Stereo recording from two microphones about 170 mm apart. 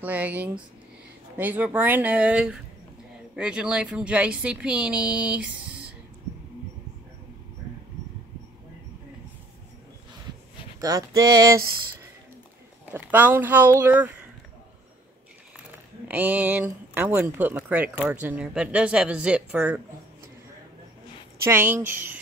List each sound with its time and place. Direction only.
0.0 s speech: 10° right (ahead or behind)
10.8 s a sound: 20° right (ahead or behind)
12.9 s speech: 10° right (ahead or behind)
16.1 s speech: 10° right (ahead or behind)
21.5 s speech: 15° right (ahead or behind)